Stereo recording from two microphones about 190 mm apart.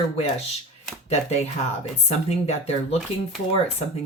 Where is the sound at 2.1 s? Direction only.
35° left (ahead or behind).